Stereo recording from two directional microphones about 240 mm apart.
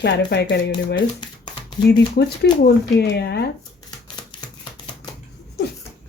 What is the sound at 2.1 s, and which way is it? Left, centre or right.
Speech, left.